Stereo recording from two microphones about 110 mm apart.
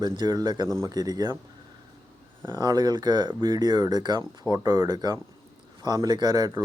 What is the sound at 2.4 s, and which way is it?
Speech, 40° right (ahead or behind).